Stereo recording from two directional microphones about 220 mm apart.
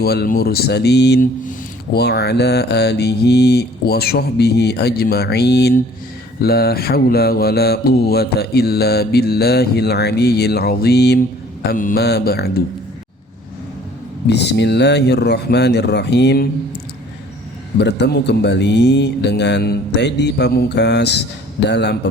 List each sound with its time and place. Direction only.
0.0 s mantra: 45° left (ahead or behind)
14.3 s mantra: 50° left (ahead or behind)
17.7 s mantra: 50° left (ahead or behind)